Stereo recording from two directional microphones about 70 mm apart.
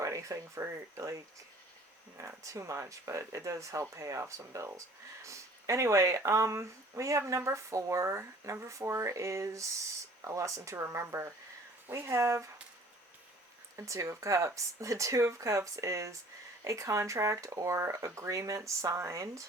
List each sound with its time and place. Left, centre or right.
0.0 s speech: right
2.2 s speech: right
13.7 s speech: right